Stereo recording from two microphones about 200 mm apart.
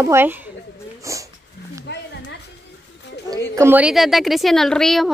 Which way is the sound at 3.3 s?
15° right (ahead or behind).